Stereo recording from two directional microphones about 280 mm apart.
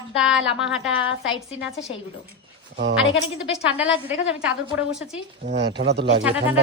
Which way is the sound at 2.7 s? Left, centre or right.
Right.